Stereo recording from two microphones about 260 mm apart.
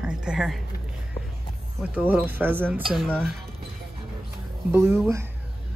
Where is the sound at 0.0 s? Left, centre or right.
Centre.